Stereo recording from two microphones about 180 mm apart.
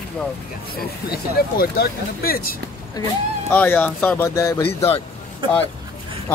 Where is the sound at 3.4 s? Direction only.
10° left (ahead or behind).